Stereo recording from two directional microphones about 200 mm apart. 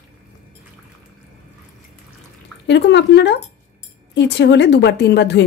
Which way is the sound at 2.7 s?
60° left (ahead or behind).